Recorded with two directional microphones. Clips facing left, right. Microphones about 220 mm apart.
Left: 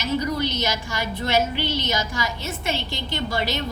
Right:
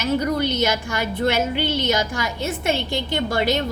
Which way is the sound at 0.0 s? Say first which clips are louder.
Right 3 dB; 55° right (ahead or behind).